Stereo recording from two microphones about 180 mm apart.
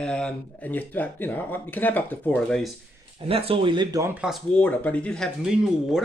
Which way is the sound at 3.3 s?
30° right (ahead or behind).